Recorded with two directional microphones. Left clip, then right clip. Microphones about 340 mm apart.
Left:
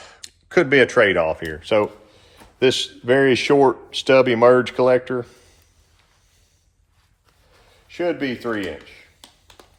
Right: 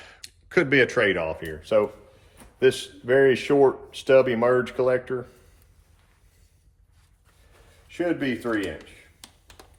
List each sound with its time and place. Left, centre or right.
0.0 s a man's voice: centre
7.9 s a man's voice: left